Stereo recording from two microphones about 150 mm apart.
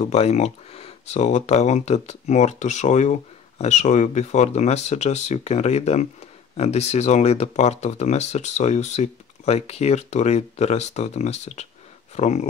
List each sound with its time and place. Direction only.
0.0 s speech: 45° left (ahead or behind)